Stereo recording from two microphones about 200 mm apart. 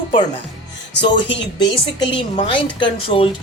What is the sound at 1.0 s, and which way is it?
A woman's voice, 25° left (ahead or behind).